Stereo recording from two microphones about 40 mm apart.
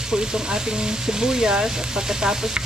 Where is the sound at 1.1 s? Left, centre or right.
Centre.